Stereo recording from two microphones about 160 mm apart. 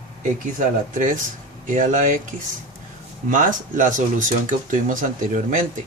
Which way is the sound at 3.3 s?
55° right (ahead or behind).